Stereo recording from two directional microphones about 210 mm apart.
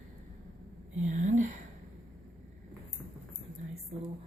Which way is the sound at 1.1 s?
35° right (ahead or behind).